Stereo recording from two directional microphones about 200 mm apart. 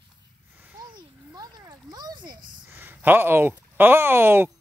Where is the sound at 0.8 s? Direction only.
20° right (ahead or behind).